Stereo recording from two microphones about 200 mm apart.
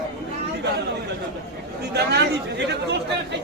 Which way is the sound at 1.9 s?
55° right (ahead or behind).